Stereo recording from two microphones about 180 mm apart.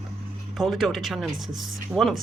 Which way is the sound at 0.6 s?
Centre (ahead or behind).